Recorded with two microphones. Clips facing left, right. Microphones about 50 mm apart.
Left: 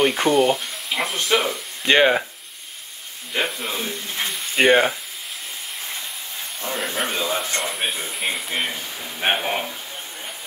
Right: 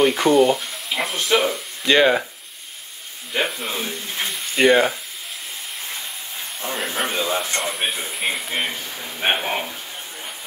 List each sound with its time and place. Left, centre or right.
0.0 s speech: centre
1.9 s speech: centre
3.3 s speech: centre
4.6 s speech: centre
6.6 s speech: centre